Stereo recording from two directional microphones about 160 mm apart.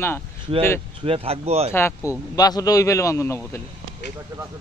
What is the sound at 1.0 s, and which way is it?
Speech, 35° right (ahead or behind).